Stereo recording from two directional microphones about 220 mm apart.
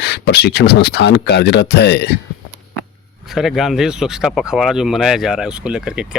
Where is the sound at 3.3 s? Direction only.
Centre (ahead or behind).